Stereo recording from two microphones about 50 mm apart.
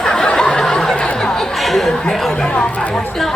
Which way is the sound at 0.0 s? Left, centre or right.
Centre.